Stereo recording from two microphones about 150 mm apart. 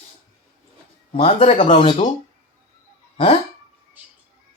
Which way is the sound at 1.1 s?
40° left (ahead or behind).